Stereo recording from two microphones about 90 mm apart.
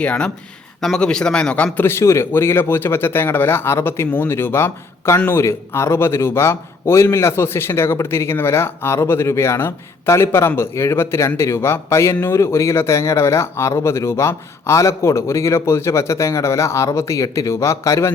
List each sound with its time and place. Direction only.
0.0 s a man's voice: 15° left (ahead or behind); by 18.1 s 35° left (ahead or behind)